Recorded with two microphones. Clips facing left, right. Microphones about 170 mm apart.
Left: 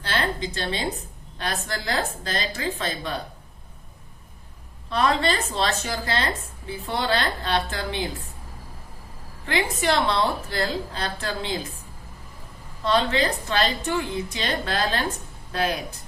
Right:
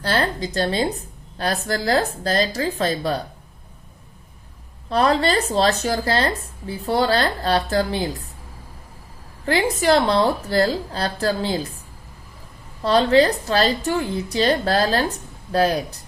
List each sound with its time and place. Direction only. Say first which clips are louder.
0.0 s a sound: right 4 dB; 40° right (ahead or behind)
1.6 s a woman's voice: right 9 dB; 35° right (ahead or behind)
4.9 s a woman's voice: right 4 dB; 35° right (ahead or behind)
9.5 s a woman's voice: right 6 dB; 35° right (ahead or behind)
12.8 s a woman's voice: right 7 dB; 35° right (ahead or behind)